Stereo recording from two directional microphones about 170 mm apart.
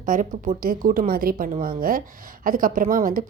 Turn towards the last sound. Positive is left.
turn(degrees=-55)  # may be behind; listen again after turning